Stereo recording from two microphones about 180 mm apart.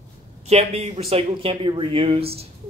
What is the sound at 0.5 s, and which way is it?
Speech, 35° right (ahead or behind).